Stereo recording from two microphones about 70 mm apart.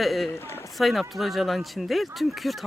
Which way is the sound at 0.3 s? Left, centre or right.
Left.